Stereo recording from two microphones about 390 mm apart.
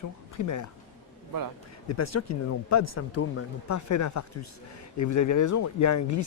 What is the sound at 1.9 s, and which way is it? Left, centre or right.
Speech, left.